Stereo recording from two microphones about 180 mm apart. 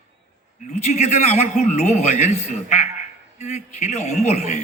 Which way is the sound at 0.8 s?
40° left (ahead or behind).